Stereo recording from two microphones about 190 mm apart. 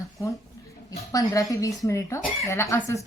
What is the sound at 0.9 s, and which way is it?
Speech, 20° left (ahead or behind).